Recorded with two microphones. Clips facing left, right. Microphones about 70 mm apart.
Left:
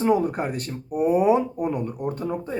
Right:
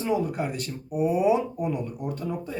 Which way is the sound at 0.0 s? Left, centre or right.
Left.